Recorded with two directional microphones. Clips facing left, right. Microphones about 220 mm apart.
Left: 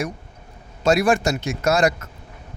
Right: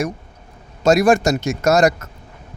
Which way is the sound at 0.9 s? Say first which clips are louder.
Right 4 dB; 45° right (ahead or behind).